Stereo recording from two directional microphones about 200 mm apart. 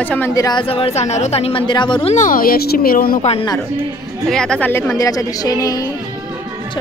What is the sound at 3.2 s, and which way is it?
Speech, 30° left (ahead or behind).